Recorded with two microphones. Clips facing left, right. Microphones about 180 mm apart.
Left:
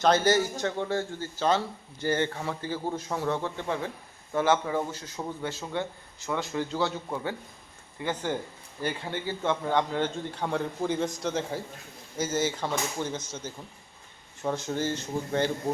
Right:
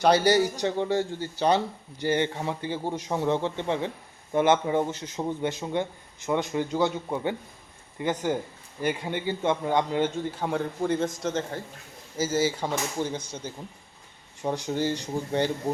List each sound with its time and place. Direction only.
0.0 s a man's voice: 15° right (ahead or behind)